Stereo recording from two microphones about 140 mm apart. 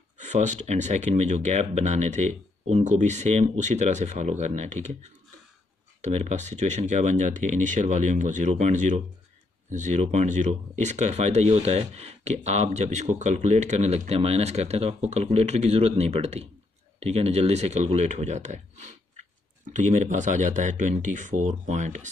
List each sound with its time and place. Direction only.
0.2 s speech: 60° right (ahead or behind)
5.9 s speech: 55° right (ahead or behind)